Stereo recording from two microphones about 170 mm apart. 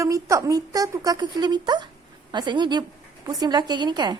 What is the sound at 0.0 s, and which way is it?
A woman's voice, 20° right (ahead or behind).